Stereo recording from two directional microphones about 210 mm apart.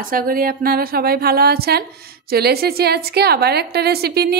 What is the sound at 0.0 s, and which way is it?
A woman's voice, 45° right (ahead or behind).